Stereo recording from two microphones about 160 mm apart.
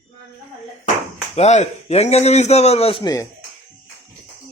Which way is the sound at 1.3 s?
45° left (ahead or behind).